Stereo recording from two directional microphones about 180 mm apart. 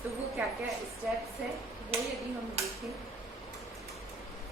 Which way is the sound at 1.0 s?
5° right (ahead or behind).